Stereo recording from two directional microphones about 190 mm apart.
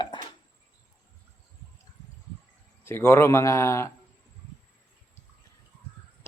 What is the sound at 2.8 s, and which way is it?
A man's voice, 15° left (ahead or behind).